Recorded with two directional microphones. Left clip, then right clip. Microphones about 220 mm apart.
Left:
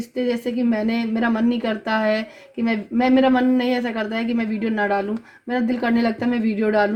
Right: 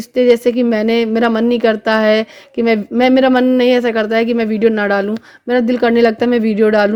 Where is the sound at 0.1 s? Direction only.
30° right (ahead or behind).